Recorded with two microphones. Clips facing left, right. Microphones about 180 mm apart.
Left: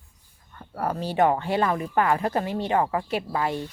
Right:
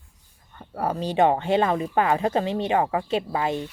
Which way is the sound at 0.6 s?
20° right (ahead or behind).